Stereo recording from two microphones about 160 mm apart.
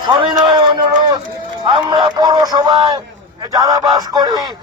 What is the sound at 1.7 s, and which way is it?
A man's voice, 30° right (ahead or behind).